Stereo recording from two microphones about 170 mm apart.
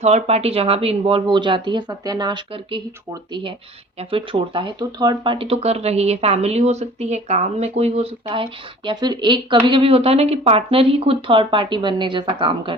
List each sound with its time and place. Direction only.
0.0 s speech: 40° right (ahead or behind)